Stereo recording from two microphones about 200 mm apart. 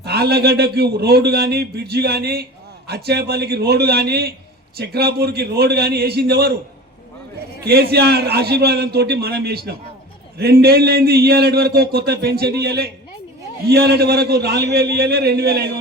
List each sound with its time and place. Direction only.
0.0 s a man's voice: 55° right (ahead or behind)
7.6 s a man's voice: 50° right (ahead or behind)